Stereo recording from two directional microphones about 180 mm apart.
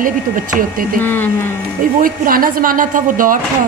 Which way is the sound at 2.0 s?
50° right (ahead or behind).